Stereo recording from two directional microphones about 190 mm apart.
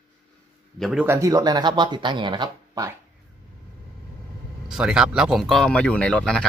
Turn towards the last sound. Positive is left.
turn(degrees=5)  # may be behind; listen again after turning